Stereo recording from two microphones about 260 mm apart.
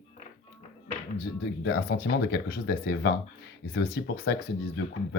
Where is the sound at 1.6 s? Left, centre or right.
Left.